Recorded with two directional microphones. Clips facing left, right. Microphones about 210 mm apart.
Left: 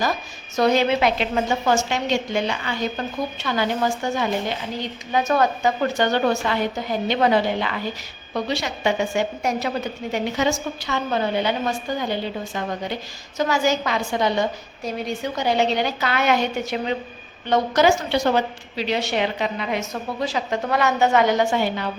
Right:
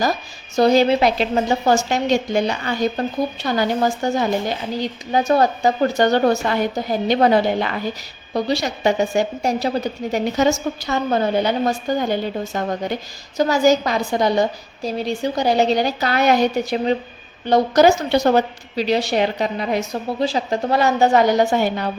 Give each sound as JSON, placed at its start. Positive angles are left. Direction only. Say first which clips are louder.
{"t": 0.0, "sound": "speech", "louder": "right 3 dB", "side_deg": -35}